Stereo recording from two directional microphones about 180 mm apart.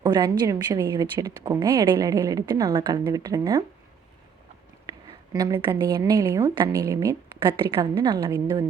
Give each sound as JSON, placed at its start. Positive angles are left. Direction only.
{"t": 0.0, "sound": "a woman's voice", "side_deg": -25}
{"t": 4.9, "sound": "a woman's voice", "side_deg": -20}